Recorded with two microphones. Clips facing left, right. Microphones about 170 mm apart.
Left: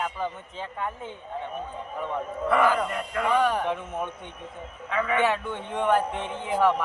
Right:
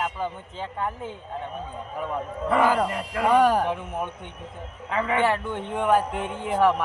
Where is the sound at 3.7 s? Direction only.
10° right (ahead or behind).